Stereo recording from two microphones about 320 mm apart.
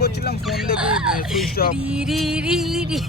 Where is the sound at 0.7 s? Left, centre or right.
Centre.